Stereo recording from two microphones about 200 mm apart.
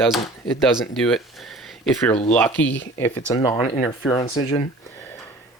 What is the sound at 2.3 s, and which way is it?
Speech, 10° left (ahead or behind).